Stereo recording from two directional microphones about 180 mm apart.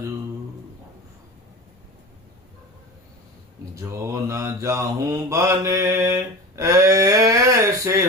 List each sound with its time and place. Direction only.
3.8 s mantra: 15° right (ahead or behind)